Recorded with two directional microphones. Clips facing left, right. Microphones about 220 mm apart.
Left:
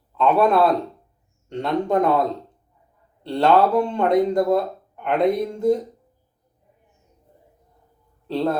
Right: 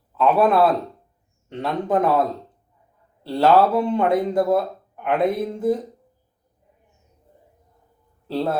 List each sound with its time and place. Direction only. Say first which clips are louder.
0.2 s speech: even; 5° right (ahead or behind)
3.2 s speech: right 1 dB; 5° right (ahead or behind)